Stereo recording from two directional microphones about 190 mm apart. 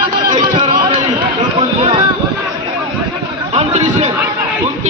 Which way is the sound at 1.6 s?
30° right (ahead or behind).